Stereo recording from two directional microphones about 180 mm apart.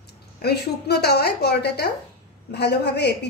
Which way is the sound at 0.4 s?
65° left (ahead or behind).